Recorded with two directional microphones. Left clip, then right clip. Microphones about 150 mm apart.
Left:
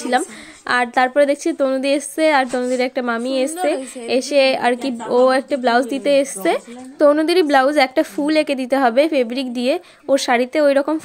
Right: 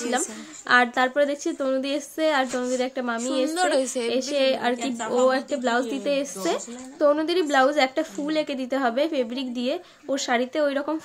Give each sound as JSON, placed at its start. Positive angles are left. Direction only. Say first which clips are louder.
{"t": 0.1, "sound": "a woman's voice", "louder": "left 8 dB", "side_deg": 45}